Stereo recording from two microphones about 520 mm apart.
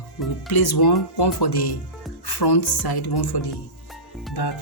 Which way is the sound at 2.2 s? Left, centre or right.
Left.